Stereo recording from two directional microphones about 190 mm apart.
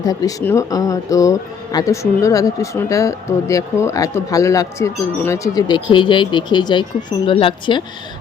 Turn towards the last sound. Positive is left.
turn(degrees=25)  # may be behind; listen again after turning